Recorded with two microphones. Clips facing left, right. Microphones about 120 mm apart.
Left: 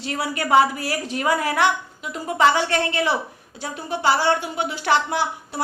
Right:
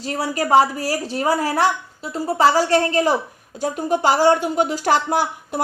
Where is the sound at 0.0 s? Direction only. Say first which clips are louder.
Right 3 dB; 35° right (ahead or behind).